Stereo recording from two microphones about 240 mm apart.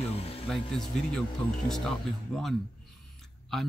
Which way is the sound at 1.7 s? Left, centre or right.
Centre.